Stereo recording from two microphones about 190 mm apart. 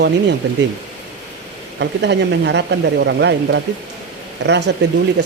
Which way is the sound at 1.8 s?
65° right (ahead or behind).